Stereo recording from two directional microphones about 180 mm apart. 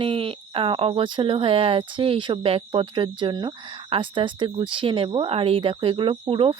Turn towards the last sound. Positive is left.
turn(degrees=-30)  # may be behind; listen again after turning